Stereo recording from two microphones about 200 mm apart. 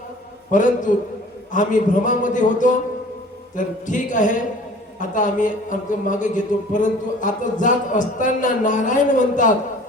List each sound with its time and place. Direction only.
0.5 s a man's voice: 40° left (ahead or behind)